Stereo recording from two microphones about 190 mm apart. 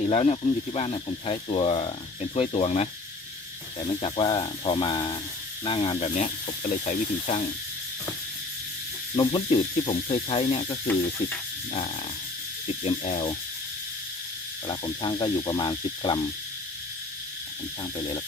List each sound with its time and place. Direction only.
0.1 s speech: 30° left (ahead or behind)
9.1 s speech: 25° left (ahead or behind)
12.6 s speech: 30° left (ahead or behind)
14.7 s speech: 25° left (ahead or behind)